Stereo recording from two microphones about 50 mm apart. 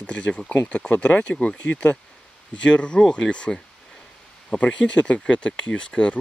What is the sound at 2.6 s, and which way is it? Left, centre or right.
Speech, centre.